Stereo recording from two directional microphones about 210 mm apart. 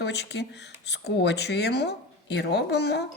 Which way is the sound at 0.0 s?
55° left (ahead or behind).